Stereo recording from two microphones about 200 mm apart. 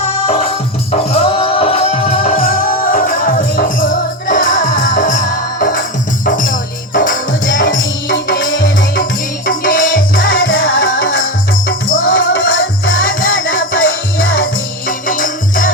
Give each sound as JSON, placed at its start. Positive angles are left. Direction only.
{"t": 0.3, "sound": "music", "side_deg": 30}
{"t": 2.4, "sound": "music", "side_deg": 45}
{"t": 7.6, "sound": "music", "side_deg": 70}
{"t": 9.5, "sound": "music", "side_deg": 45}
{"t": 10.5, "sound": "music", "side_deg": 70}
{"t": 11.9, "sound": "music", "side_deg": 45}
{"t": 12.1, "sound": "music", "side_deg": 70}
{"t": 13.0, "sound": "music", "side_deg": 45}
{"t": 13.8, "sound": "music", "side_deg": 80}
{"t": 14.4, "sound": "music", "side_deg": 45}